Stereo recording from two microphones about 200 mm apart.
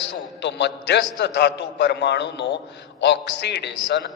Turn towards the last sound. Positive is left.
turn(degrees=60)  # may be behind; listen again after turning